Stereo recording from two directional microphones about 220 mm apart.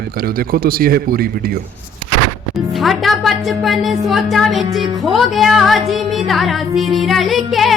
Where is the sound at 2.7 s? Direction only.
Centre (ahead or behind).